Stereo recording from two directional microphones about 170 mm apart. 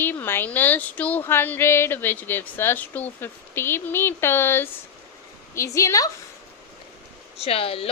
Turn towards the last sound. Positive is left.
turn(degrees=35)  # may be behind; listen again after turning